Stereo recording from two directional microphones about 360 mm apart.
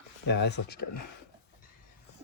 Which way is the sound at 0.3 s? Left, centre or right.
Left.